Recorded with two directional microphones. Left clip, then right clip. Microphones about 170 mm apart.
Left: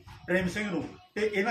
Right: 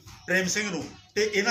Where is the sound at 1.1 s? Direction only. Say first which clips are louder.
Right 4 dB; 15° right (ahead or behind).